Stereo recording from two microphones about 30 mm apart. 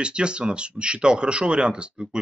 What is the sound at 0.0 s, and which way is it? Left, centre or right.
Speech, right.